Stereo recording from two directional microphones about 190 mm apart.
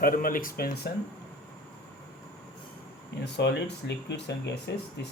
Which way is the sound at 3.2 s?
65° left (ahead or behind).